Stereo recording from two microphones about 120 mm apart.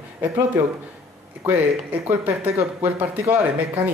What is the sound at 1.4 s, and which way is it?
Speech, 15° right (ahead or behind).